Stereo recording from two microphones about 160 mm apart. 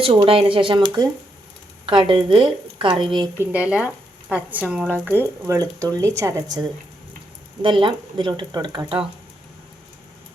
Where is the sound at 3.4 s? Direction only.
10° right (ahead or behind); by 9.0 s 30° right (ahead or behind).